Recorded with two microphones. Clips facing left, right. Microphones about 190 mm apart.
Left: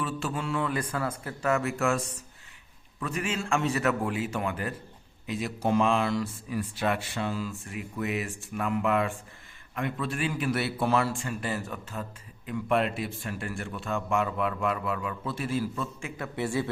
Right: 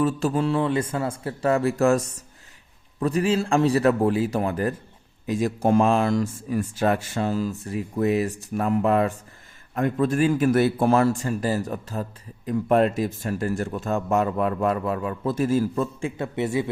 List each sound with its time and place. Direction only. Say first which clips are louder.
0.0 s a man's voice: right 10 dB; 40° right (ahead or behind); by 16.6 s 20° right (ahead or behind)